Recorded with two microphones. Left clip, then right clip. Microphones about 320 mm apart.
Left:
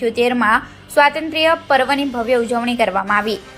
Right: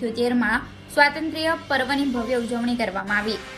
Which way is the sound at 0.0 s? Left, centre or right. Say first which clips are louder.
Left 7 dB; left.